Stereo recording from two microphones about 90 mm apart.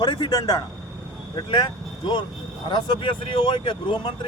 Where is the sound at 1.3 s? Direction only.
55° left (ahead or behind).